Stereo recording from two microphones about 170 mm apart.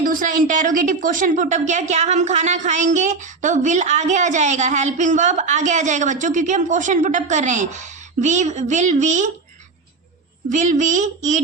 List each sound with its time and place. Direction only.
0.0 s a woman's voice: 50° right (ahead or behind)
10.5 s a woman's voice: 50° right (ahead or behind)